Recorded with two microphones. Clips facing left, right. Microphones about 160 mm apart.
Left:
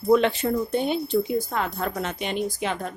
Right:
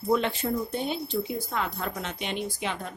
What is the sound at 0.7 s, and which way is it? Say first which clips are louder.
Speech: left 7 dB; 60° left (ahead or behind).